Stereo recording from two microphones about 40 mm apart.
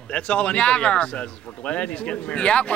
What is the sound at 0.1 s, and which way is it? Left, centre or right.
Speech, left.